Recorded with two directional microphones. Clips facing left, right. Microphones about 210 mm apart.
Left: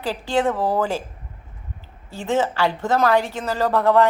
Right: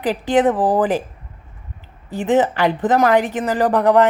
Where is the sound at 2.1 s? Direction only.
20° right (ahead or behind).